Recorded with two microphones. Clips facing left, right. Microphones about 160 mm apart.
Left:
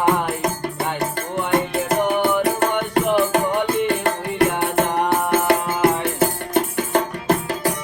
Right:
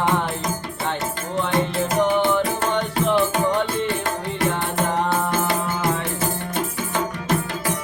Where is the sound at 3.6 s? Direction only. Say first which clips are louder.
Left 4 dB; 60° left (ahead or behind).